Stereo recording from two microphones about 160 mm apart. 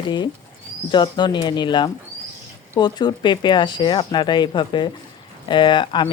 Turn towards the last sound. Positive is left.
turn(degrees=30)  # may be behind; listen again after turning